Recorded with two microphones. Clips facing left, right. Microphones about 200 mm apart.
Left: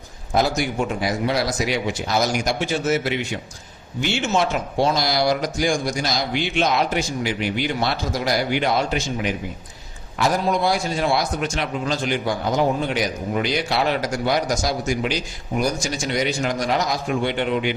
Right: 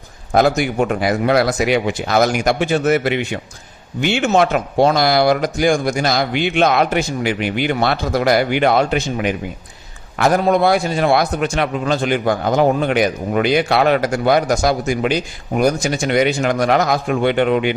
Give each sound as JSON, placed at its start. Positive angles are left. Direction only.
{"t": 0.3, "sound": "a man's voice", "side_deg": -55}